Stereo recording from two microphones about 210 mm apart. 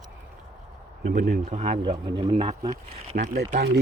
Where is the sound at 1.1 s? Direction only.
40° right (ahead or behind).